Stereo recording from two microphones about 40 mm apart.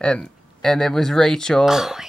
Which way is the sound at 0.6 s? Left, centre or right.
Centre.